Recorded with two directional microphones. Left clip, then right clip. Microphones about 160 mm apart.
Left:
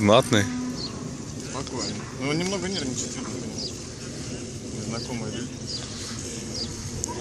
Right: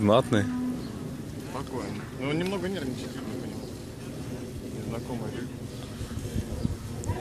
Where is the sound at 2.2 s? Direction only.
45° left (ahead or behind).